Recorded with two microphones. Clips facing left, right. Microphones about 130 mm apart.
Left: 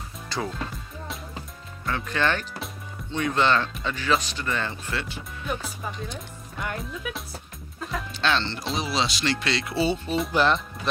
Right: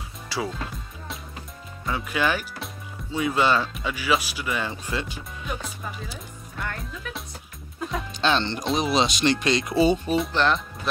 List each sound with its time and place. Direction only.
0.3 s music: 5° right (ahead or behind)
1.9 s speech: 10° right (ahead or behind)
5.6 s speech: 5° right (ahead or behind)
8.1 s speech: 15° right (ahead or behind)
10.1 s speech: centre (ahead or behind)